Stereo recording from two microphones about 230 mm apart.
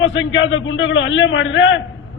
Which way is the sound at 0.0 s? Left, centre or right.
Left.